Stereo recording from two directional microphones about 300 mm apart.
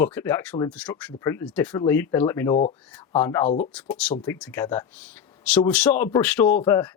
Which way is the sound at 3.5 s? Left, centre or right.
Left.